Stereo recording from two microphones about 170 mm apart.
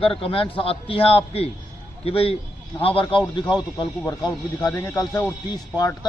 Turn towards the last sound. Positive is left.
turn(degrees=20)  # may be behind; listen again after turning